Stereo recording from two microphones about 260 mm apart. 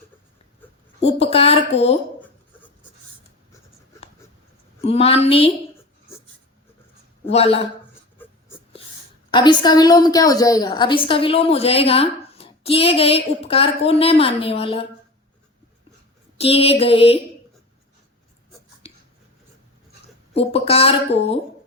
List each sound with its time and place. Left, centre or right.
1.0 s a woman's voice: left
4.8 s a woman's voice: left
7.3 s a woman's voice: left
8.2 s a sound: centre
9.3 s a woman's voice: centre
16.4 s a woman's voice: left
20.3 s a woman's voice: left